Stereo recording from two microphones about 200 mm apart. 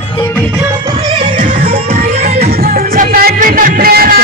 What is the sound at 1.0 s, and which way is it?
Music, 20° right (ahead or behind).